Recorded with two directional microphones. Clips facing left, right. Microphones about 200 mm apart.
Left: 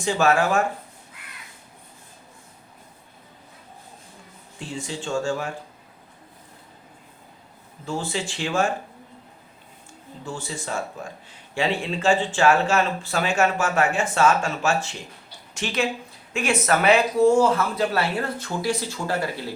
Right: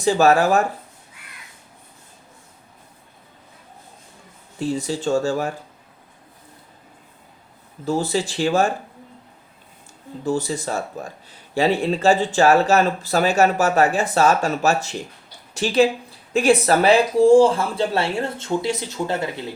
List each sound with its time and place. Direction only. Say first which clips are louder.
0.0 s speech: right 5 dB; 35° right (ahead or behind)
4.7 s speech: right 6 dB; 40° right (ahead or behind)
7.9 s speech: right 7 dB; 40° right (ahead or behind)
10.2 s speech: right 9 dB; 40° right (ahead or behind); by 19.3 s 20° right (ahead or behind)